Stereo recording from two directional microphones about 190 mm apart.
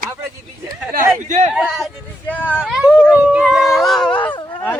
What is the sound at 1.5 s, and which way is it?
Speech, centre (ahead or behind).